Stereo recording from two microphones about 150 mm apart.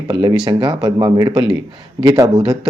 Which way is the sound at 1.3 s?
35° right (ahead or behind).